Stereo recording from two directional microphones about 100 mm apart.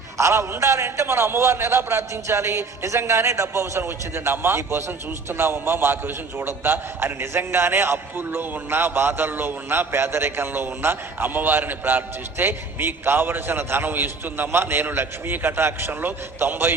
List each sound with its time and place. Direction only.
0.2 s a man's voice: 30° right (ahead or behind)